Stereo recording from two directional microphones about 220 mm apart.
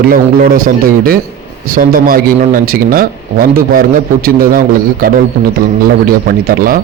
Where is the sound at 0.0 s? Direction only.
40° right (ahead or behind).